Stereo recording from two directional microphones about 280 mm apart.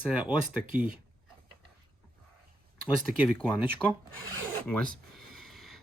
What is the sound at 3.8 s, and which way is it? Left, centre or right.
Speech, centre.